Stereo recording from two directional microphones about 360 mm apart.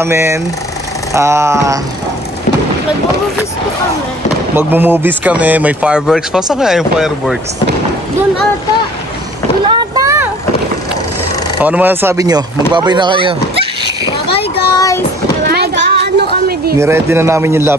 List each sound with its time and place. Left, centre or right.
0.0 s speech: centre
4.6 s speech: centre
9.7 s boat: centre
11.6 s speech: centre
14.3 s child singing: centre
15.4 s a sound: right
16.7 s speech: centre